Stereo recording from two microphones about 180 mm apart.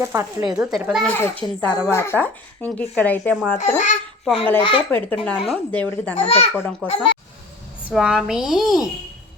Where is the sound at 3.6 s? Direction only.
40° left (ahead or behind).